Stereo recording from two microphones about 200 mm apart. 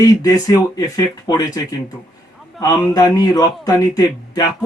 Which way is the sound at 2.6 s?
15° left (ahead or behind).